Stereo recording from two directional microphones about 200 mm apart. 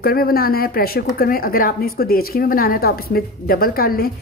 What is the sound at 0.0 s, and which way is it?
Speech, 50° left (ahead or behind).